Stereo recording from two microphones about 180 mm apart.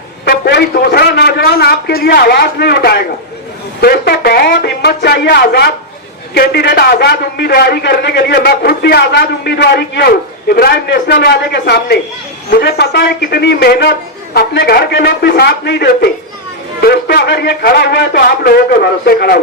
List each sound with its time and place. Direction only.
0.3 s a man's voice: 60° left (ahead or behind)